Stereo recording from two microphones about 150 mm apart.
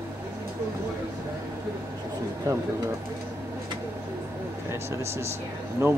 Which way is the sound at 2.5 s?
20° right (ahead or behind).